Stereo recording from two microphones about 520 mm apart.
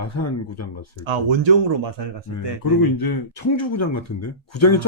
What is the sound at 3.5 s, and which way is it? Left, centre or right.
Speech, left.